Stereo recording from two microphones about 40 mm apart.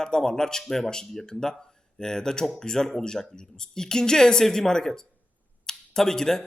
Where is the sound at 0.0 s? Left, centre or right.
Centre.